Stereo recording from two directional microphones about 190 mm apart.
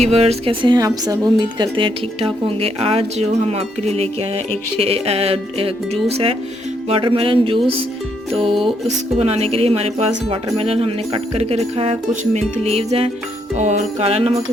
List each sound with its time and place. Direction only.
0.0 s speech: 35° right (ahead or behind)
9.1 s speech: 35° right (ahead or behind)